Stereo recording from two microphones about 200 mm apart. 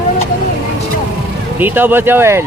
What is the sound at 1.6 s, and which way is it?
Speech, 10° right (ahead or behind).